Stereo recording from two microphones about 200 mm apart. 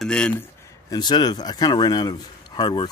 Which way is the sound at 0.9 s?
20° left (ahead or behind).